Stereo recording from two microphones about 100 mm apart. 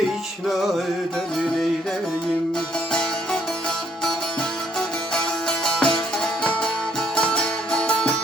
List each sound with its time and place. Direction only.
0.4 s music: centre (ahead or behind)
5.1 s music: 5° left (ahead or behind)